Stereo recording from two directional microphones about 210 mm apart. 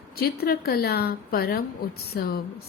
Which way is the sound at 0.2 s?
45° left (ahead or behind).